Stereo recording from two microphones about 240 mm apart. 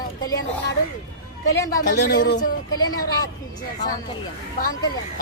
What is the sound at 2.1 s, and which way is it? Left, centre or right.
Speech, left.